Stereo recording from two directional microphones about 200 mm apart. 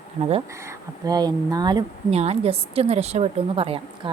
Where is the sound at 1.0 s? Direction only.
20° right (ahead or behind).